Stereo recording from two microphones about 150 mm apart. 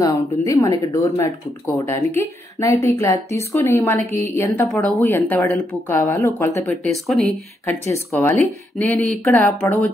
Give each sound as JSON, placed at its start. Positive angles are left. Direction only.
{"t": 0.0, "sound": "a woman's voice", "side_deg": 20}
{"t": 6.7, "sound": "speech", "side_deg": 0}
{"t": 7.9, "sound": "a woman's voice", "side_deg": 20}
{"t": 8.3, "sound": "speech", "side_deg": 5}